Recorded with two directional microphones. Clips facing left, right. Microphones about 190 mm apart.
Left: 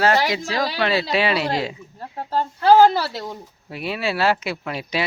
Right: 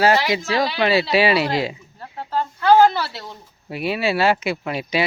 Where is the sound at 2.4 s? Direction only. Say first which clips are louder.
Left 1 dB; 35° left (ahead or behind).